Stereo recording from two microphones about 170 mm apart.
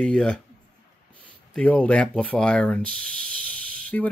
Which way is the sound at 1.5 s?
10° left (ahead or behind).